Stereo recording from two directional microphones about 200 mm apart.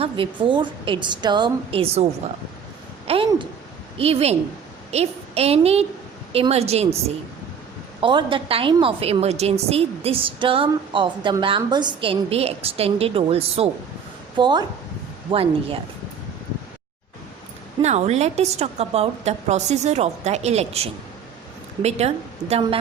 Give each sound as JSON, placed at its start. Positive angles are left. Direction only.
{"t": 0.0, "sound": "a woman's voice", "side_deg": -25}
{"t": 3.1, "sound": "a woman's voice", "side_deg": -25}
{"t": 8.0, "sound": "a woman's voice", "side_deg": -25}
{"t": 17.8, "sound": "a woman's voice", "side_deg": -35}